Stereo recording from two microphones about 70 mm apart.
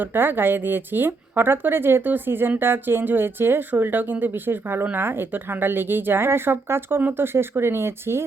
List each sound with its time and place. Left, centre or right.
0.0 s speech: right